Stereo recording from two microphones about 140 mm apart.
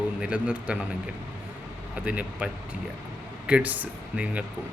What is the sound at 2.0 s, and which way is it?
Speech, 10° right (ahead or behind).